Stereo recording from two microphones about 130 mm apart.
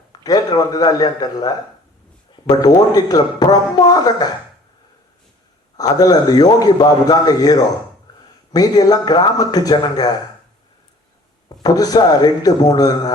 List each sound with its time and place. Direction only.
0.1 s a man's voice: 30° left (ahead or behind)
2.6 s a man's voice: 30° left (ahead or behind)
5.7 s a man's voice: 30° left (ahead or behind)
11.4 s a man's voice: 30° left (ahead or behind)